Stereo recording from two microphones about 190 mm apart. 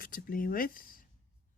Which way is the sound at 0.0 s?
50° left (ahead or behind).